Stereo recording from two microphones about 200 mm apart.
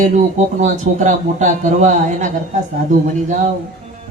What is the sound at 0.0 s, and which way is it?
A man's voice, 40° right (ahead or behind).